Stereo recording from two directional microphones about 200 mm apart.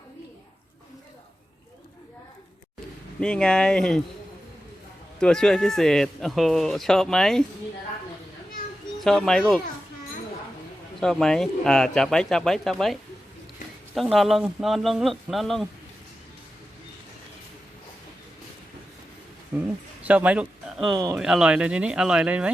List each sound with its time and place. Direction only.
3.2 s speech: 5° left (ahead or behind)
5.2 s speech: 5° left (ahead or behind)
9.0 s speech: centre (ahead or behind)
11.0 s speech: centre (ahead or behind)
19.5 s speech: 5° right (ahead or behind)
20.9 s speech: 15° right (ahead or behind)
21.2 s speech: 5° right (ahead or behind)